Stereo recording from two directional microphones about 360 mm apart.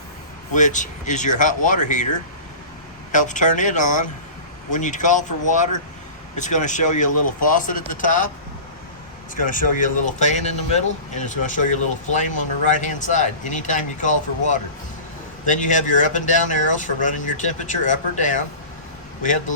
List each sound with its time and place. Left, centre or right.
0.5 s speech: left
3.1 s speech: left
9.3 s speech: left
15.4 s speech: left